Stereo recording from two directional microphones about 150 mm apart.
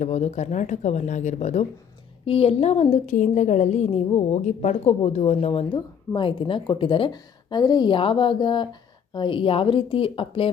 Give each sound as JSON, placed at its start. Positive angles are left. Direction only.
{"t": 0.0, "sound": "a woman's voice", "side_deg": 50}
{"t": 3.1, "sound": "a woman's voice", "side_deg": 55}